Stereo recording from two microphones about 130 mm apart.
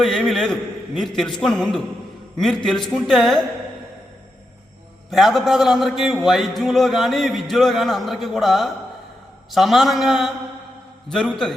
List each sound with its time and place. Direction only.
0.0 s a man's voice: centre (ahead or behind)
5.1 s a man's voice: centre (ahead or behind)